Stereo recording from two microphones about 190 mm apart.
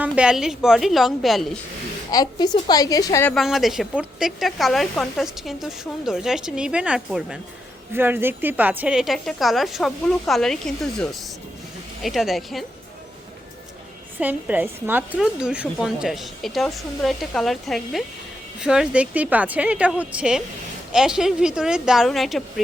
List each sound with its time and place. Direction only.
0.0 s speech: 5° right (ahead or behind)
2.0 s a woman's voice: 20° left (ahead or behind)
3.3 s speech: centre (ahead or behind)
14.2 s speech: 10° right (ahead or behind)